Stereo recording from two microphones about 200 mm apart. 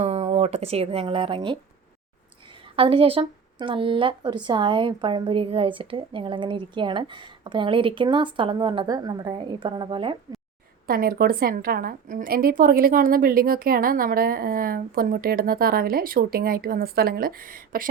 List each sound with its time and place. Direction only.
0.0 s speech: 30° right (ahead or behind)
2.7 s a woman's voice: 30° right (ahead or behind)
10.8 s a woman's voice: 45° right (ahead or behind)